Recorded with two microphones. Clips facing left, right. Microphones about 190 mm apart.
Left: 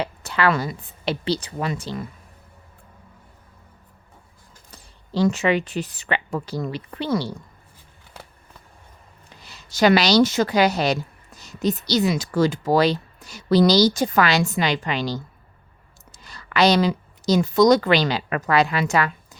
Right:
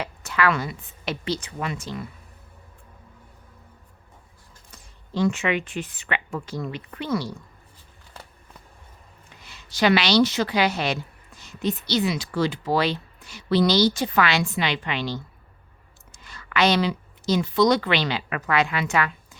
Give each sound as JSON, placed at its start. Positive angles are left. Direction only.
{"t": 0.0, "sound": "speech", "side_deg": 30}
{"t": 4.7, "sound": "speech", "side_deg": 35}
{"t": 9.3, "sound": "a woman's voice", "side_deg": 35}